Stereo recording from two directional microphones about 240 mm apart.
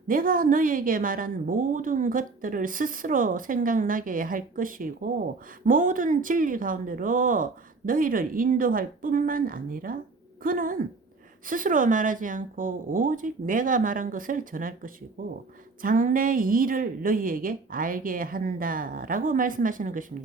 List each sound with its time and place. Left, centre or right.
0.1 s a woman's voice: right
15.8 s a woman's voice: right